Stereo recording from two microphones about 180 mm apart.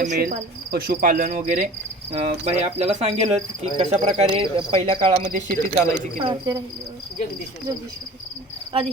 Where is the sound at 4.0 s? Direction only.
45° right (ahead or behind).